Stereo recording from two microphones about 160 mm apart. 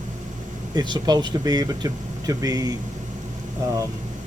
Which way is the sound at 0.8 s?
25° right (ahead or behind).